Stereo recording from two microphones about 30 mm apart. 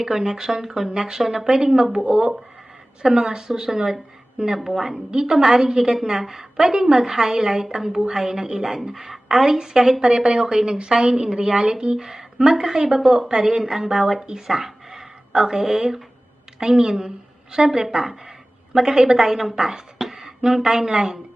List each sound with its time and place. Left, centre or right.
0.0 s a woman's voice: right
1.2 s a woman's voice: centre
1.5 s a woman's voice: right
4.5 s a woman's voice: centre
10.0 s a woman's voice: right
10.4 s a woman's voice: centre
10.7 s a woman's voice: right
14.4 s a sound: centre
15.4 s a woman's voice: centre
17.7 s a sound: centre
18.9 s a woman's voice: right
20.1 s a sound: centre